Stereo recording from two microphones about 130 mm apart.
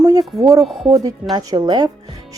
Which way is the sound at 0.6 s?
Centre (ahead or behind).